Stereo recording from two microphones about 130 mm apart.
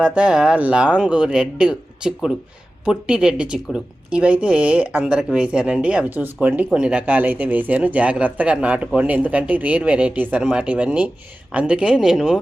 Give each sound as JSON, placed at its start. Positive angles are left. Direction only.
{"t": 0.0, "sound": "speech", "side_deg": -10}